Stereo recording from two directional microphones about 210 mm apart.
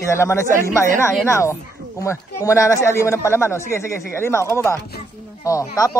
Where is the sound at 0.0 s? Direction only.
10° left (ahead or behind).